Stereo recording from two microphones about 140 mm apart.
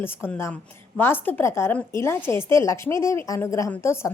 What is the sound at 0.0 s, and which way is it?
A woman's voice, 15° left (ahead or behind).